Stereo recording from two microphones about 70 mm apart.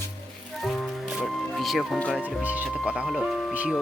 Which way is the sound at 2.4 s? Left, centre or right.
Right.